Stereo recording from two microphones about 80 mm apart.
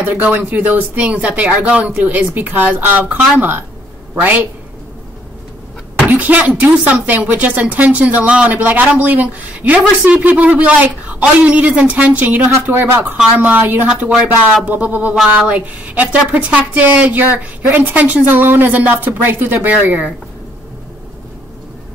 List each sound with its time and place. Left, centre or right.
0.0 s a man's voice: right
6.0 s speech: centre